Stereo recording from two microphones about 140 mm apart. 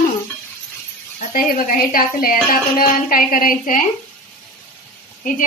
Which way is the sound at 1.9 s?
90° left.